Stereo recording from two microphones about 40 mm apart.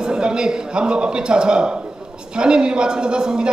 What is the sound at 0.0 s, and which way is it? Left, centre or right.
A man's voice, right.